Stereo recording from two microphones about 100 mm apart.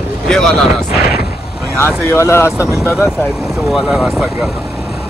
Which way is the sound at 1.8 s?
25° left (ahead or behind).